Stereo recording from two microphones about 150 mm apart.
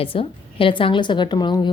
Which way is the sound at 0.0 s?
35° left (ahead or behind).